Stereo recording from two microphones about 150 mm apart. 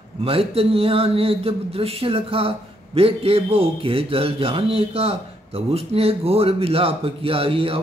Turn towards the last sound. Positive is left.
turn(degrees=-40)  # may be behind; listen again after turning